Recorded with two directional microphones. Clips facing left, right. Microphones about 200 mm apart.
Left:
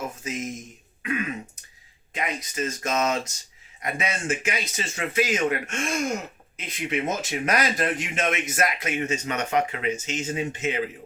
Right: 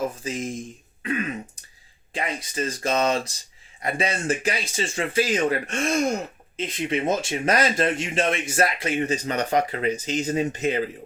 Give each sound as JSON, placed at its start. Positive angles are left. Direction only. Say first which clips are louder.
{"t": 0.2, "sound": "speech", "louder": "right 2 dB", "side_deg": -30}
{"t": 2.1, "sound": "speech", "louder": "right 1 dB", "side_deg": -30}